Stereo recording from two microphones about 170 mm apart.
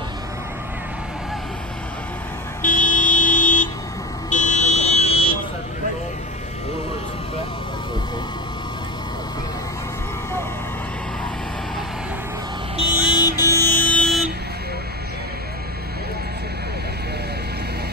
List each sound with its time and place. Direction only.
2.6 s vehicle: 50° left (ahead or behind)
4.3 s car alarm: 45° left (ahead or behind)
12.7 s vehicle: 30° left (ahead or behind)
13.6 s music: 10° left (ahead or behind)